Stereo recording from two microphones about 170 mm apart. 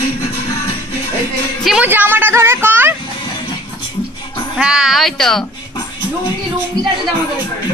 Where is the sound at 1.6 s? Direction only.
10° right (ahead or behind).